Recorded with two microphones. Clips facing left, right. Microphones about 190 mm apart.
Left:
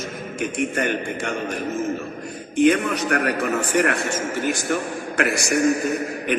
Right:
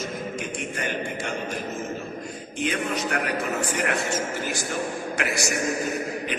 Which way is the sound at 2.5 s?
60° left (ahead or behind).